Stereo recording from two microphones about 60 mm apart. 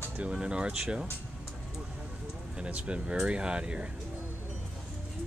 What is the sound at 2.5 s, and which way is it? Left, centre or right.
Speech, centre.